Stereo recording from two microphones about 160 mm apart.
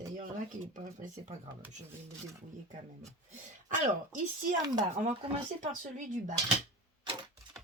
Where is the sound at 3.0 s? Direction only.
45° right (ahead or behind).